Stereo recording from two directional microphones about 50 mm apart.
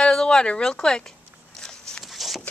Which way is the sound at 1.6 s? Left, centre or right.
Centre.